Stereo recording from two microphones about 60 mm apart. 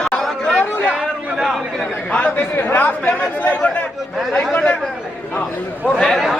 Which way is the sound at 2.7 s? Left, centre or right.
Left.